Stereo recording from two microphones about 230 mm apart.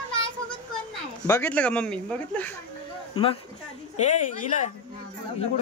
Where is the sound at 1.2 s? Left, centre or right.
Centre.